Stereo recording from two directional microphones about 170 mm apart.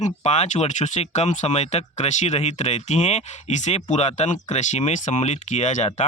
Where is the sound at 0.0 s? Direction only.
40° left (ahead or behind).